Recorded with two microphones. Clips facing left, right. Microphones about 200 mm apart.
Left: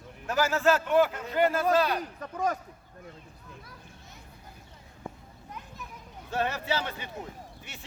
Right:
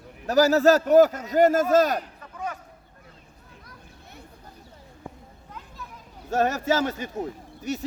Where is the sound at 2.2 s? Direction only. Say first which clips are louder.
Left 5 dB; 40° left (ahead or behind).